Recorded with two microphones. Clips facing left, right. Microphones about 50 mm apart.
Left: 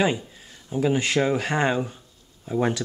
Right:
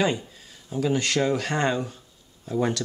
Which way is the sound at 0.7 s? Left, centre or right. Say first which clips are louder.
Left 2 dB; centre.